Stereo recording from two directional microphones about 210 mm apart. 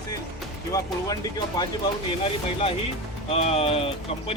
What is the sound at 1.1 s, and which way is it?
Speech, 15° left (ahead or behind).